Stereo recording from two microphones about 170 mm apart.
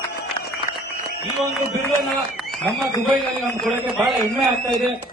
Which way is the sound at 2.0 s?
Centre (ahead or behind).